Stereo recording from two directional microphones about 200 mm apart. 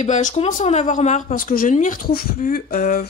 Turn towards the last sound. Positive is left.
turn(degrees=45)  # may be behind; listen again after turning